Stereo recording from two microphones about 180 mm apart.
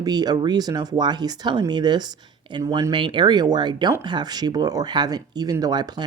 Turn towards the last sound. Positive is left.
turn(degrees=-25)  # may be behind; listen again after turning